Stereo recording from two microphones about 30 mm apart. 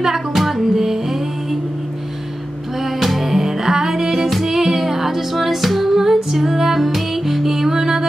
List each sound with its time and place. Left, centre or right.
0.0 s music: centre
0.4 s music: centre
0.7 s music: centre
2.8 s music: centre
3.3 s music: centre